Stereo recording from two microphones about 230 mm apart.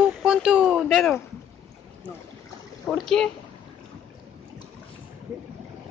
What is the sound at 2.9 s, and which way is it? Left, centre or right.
Speech, centre.